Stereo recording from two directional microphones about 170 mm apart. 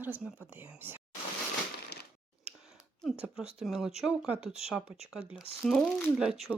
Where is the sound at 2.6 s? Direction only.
Centre (ahead or behind).